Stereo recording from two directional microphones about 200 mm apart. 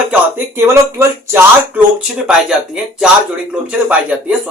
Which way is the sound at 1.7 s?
5° right (ahead or behind).